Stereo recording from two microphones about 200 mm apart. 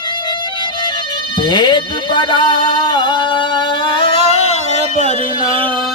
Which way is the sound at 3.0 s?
25° left (ahead or behind).